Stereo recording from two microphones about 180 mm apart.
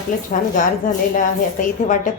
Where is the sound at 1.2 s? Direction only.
45° left (ahead or behind).